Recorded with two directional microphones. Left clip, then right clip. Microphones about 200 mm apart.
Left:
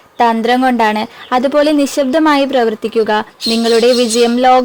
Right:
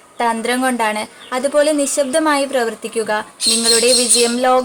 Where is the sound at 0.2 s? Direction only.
40° left (ahead or behind).